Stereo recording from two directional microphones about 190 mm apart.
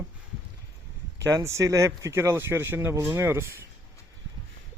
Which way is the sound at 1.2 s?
15° right (ahead or behind).